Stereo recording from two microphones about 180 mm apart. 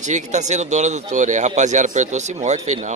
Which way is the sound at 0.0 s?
40° right (ahead or behind).